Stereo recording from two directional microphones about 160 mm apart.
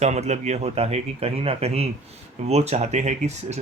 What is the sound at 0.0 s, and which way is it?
Speech, 45° right (ahead or behind).